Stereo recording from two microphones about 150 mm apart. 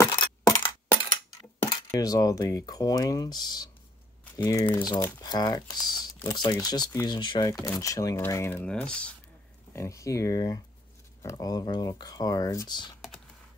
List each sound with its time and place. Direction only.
0.1 s a sound: 30° left (ahead or behind)
1.7 s speech: 25° left (ahead or behind)
8.6 s speech: 5° left (ahead or behind)
9.8 s speech: 20° left (ahead or behind)